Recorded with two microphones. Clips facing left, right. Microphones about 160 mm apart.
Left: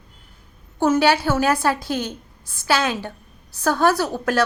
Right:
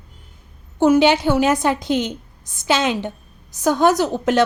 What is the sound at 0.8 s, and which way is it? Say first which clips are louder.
A woman's voice: right 4 dB; 15° right (ahead or behind).